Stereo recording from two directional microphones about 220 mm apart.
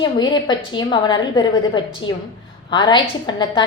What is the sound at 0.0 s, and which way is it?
A woman's voice, 20° left (ahead or behind).